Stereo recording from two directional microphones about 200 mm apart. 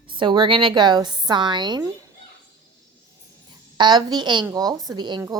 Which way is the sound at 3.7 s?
20° right (ahead or behind).